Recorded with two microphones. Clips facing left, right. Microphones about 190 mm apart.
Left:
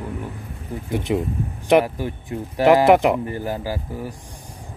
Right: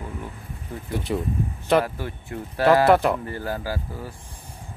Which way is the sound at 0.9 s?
20° left (ahead or behind).